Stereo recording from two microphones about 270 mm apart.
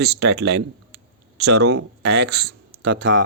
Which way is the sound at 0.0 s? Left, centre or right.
Right.